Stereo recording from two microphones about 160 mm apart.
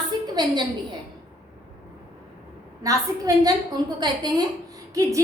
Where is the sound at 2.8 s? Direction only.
20° right (ahead or behind).